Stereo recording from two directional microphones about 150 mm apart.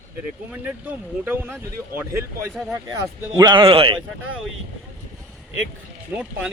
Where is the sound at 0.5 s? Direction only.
10° right (ahead or behind).